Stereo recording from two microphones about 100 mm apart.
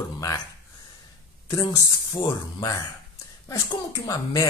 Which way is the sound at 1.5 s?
40° left (ahead or behind).